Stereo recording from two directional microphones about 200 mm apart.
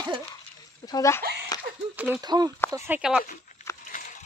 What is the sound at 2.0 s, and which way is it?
Speech, 5° right (ahead or behind).